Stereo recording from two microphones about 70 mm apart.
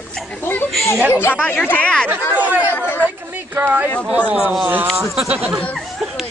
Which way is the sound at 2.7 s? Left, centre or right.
Left.